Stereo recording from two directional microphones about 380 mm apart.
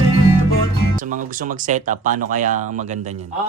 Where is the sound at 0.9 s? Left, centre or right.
Right.